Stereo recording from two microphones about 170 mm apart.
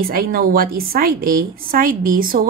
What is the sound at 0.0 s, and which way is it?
A woman's voice, 60° right (ahead or behind).